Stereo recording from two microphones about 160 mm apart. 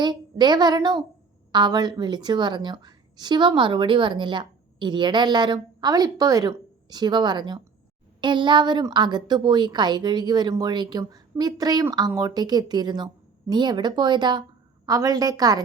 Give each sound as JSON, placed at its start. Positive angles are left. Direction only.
{"t": 0.0, "sound": "a woman's voice", "side_deg": -25}